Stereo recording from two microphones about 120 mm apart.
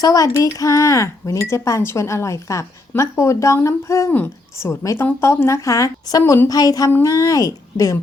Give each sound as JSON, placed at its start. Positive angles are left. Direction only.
{"t": 0.0, "sound": "speech", "side_deg": 30}